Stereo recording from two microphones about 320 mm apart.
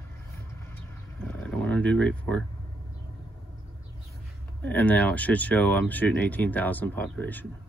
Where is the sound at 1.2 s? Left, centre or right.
Centre.